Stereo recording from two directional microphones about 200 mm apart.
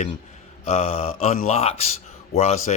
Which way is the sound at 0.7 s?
30° left (ahead or behind).